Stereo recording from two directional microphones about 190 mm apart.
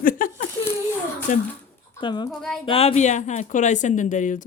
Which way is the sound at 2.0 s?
25° left (ahead or behind).